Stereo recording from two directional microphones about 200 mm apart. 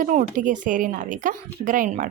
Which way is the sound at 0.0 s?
40° right (ahead or behind).